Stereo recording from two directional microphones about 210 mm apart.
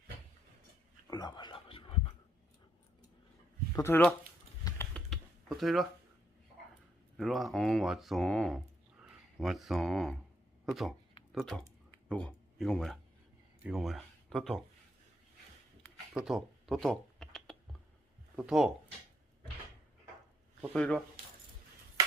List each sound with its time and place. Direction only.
1.0 s whispering: 20° left (ahead or behind)
3.8 s speech: 10° left (ahead or behind)
4.6 s typing: 5° left (ahead or behind)
7.2 s speech: centre (ahead or behind)
16.1 s computer keyboard: centre (ahead or behind)
18.3 s speech: 5° right (ahead or behind)
20.6 s speech: 5° left (ahead or behind)